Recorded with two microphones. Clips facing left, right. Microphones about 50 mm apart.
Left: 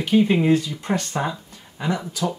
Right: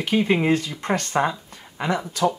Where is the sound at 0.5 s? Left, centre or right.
Right.